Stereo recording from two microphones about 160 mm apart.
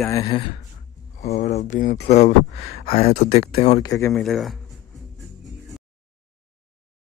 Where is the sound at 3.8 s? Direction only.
20° left (ahead or behind).